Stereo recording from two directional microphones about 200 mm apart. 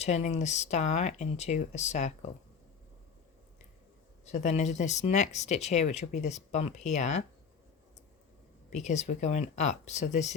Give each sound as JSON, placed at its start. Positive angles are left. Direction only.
{"t": 0.0, "sound": "speech", "side_deg": 35}
{"t": 4.3, "sound": "speech", "side_deg": 35}
{"t": 8.7, "sound": "speech", "side_deg": 35}